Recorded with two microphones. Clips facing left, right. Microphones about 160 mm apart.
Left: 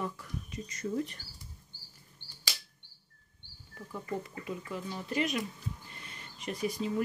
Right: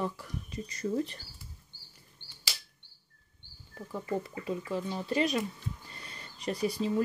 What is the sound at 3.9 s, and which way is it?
Speech, 30° right (ahead or behind).